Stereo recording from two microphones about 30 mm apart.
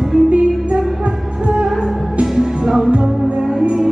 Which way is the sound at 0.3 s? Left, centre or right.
Right.